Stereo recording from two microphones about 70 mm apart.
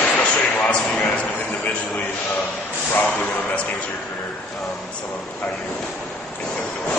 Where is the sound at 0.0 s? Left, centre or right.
Centre.